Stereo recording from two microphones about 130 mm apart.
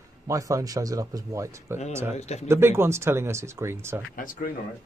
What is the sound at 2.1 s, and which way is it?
Speech, 55° left (ahead or behind).